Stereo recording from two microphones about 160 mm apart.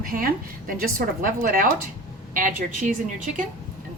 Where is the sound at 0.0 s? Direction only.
60° right (ahead or behind).